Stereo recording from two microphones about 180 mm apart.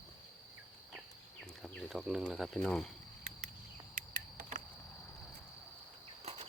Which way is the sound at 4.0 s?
50° right (ahead or behind).